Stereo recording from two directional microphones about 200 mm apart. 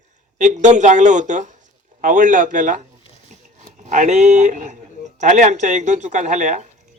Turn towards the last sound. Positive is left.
turn(degrees=-35)  # may be behind; listen again after turning